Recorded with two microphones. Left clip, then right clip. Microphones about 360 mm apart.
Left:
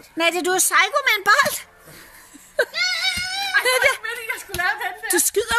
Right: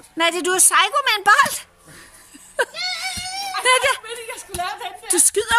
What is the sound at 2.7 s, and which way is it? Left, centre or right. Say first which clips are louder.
Whimper: left 4 dB; left.